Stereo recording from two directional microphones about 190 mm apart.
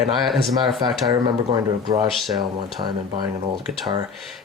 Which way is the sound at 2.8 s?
35° right (ahead or behind).